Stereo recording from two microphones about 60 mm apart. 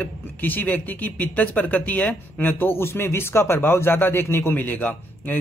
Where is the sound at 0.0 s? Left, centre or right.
Left.